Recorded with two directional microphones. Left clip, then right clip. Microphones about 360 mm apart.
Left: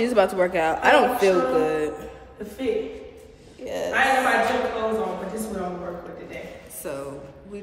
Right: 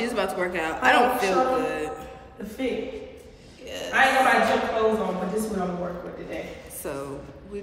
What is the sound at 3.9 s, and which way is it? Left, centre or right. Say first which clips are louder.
Speech: right 1 dB; centre.